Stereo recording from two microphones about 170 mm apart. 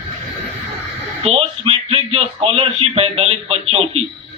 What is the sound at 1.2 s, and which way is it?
Speech, 35° right (ahead or behind).